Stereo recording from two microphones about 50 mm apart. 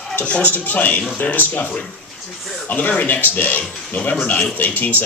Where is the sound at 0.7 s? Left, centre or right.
Left.